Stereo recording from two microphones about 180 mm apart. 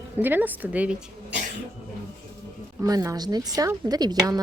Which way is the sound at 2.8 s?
20° right (ahead or behind).